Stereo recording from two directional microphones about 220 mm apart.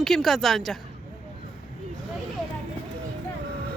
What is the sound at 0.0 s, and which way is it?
Speech, centre (ahead or behind).